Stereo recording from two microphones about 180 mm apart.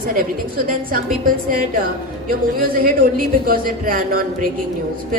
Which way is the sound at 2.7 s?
50° right (ahead or behind).